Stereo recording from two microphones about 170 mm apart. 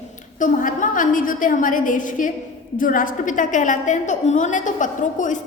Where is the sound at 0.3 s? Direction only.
50° left (ahead or behind).